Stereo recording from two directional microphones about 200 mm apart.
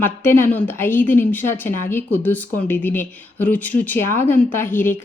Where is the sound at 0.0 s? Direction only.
10° left (ahead or behind).